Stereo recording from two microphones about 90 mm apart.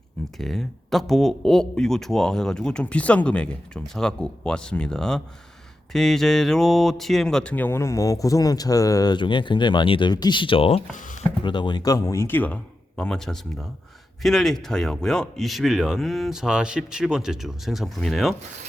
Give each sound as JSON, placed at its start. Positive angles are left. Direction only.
{"t": 0.3, "sound": "speech", "side_deg": 0}
{"t": 7.5, "sound": "speech", "side_deg": 25}
{"t": 9.1, "sound": "speech", "side_deg": 60}
{"t": 10.1, "sound": "speech", "side_deg": 55}
{"t": 11.4, "sound": "speech", "side_deg": 60}
{"t": 11.9, "sound": "speech", "side_deg": 40}
{"t": 13.0, "sound": "speech", "side_deg": 5}